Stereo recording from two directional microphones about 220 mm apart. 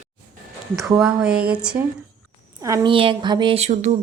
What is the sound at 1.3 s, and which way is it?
Speech, 45° right (ahead or behind).